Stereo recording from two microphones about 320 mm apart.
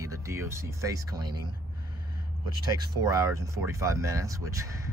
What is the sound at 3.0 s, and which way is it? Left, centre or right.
Speech, centre.